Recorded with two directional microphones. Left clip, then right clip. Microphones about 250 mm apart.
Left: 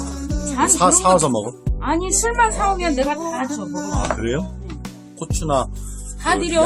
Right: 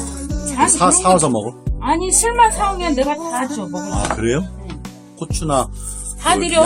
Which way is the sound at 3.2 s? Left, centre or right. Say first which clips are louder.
Right 2 dB; centre.